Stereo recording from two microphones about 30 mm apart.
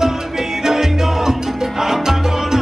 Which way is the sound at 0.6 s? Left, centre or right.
Centre.